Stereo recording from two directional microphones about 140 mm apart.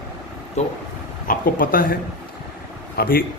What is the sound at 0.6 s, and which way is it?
Speech, 55° left (ahead or behind).